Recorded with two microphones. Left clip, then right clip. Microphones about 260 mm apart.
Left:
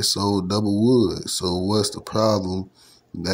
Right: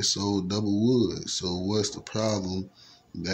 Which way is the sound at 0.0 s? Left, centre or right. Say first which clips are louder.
Left 5 dB; centre.